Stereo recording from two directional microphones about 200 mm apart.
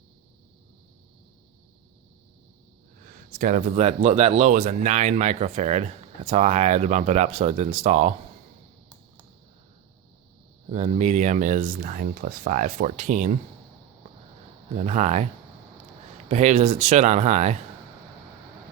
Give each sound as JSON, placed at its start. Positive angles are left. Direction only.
{"t": 3.3, "sound": "speech", "side_deg": -40}
{"t": 10.7, "sound": "speech", "side_deg": -30}
{"t": 14.8, "sound": "speech", "side_deg": -35}
{"t": 16.3, "sound": "speech", "side_deg": -35}